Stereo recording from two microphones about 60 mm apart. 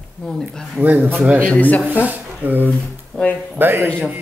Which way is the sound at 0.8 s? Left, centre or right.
Right.